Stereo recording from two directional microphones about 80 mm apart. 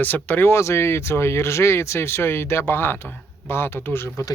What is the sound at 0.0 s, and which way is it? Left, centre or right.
Speech, left.